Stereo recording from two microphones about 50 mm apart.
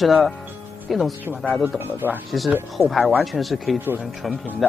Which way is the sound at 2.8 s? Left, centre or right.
Centre.